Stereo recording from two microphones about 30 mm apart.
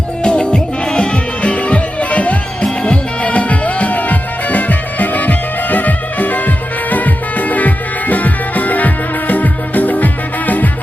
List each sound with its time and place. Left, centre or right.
0.2 s music: left